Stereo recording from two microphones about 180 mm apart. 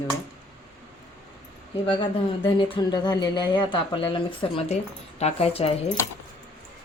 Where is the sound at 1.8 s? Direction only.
25° left (ahead or behind).